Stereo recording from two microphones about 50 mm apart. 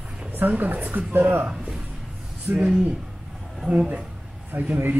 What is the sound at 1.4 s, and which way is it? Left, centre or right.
Speech, right.